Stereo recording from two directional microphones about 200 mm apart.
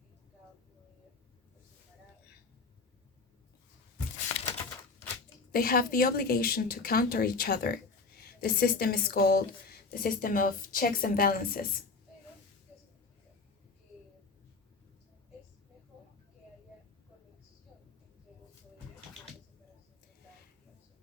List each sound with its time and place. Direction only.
5.5 s speech: 45° left (ahead or behind)